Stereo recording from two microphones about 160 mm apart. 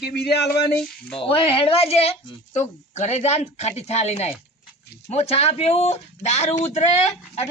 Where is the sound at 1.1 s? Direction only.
35° left (ahead or behind).